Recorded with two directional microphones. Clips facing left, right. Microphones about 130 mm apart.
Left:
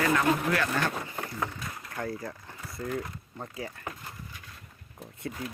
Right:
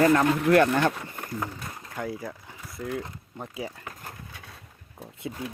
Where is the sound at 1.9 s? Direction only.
5° right (ahead or behind).